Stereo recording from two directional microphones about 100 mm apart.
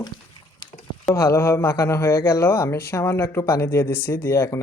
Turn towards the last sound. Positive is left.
turn(degrees=30)  # may be behind; listen again after turning